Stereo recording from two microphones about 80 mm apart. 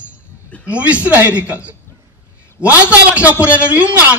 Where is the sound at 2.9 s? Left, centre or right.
Centre.